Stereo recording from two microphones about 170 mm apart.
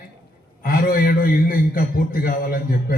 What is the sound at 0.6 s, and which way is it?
A man's voice, 60° left (ahead or behind).